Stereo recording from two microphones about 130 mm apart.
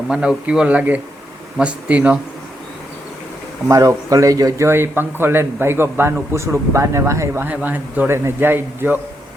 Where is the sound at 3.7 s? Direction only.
25° right (ahead or behind).